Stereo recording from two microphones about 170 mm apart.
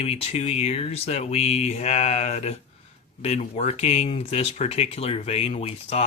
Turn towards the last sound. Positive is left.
turn(degrees=40)  # may be behind; listen again after turning